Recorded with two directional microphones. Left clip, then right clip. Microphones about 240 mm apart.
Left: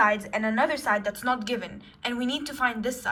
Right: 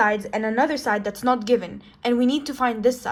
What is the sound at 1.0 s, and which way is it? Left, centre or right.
A woman's voice, right.